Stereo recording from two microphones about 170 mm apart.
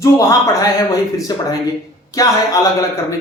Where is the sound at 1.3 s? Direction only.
25° left (ahead or behind).